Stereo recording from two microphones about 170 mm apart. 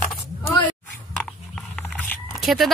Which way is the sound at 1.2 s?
5° left (ahead or behind).